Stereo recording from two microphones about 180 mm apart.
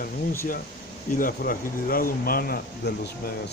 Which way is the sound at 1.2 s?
55° left (ahead or behind).